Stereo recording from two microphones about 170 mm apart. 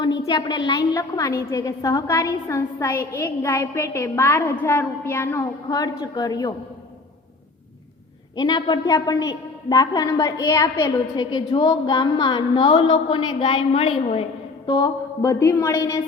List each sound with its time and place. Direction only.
0.0 s a woman's voice: 20° left (ahead or behind)
8.4 s a woman's voice: 25° left (ahead or behind)
14.7 s a woman's voice: 20° left (ahead or behind)